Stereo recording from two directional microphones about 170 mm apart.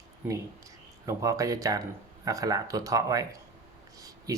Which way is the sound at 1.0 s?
20° right (ahead or behind).